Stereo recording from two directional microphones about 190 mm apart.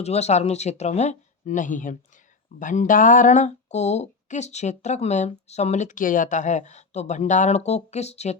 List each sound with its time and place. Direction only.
0.0 s speech: 35° left (ahead or behind)